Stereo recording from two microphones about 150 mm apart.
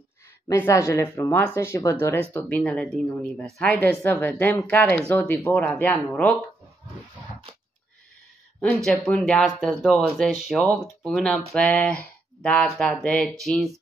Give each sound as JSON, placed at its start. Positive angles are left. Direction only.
{"t": 0.5, "sound": "speech", "side_deg": 20}
{"t": 2.3, "sound": "speech", "side_deg": 5}
{"t": 8.5, "sound": "speech", "side_deg": 5}